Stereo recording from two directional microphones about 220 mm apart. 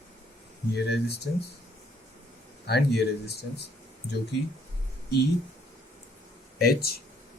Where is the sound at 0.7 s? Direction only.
50° left (ahead or behind).